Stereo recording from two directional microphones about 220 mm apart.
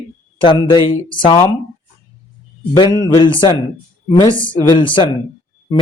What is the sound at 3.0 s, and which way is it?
Speech, 20° left (ahead or behind).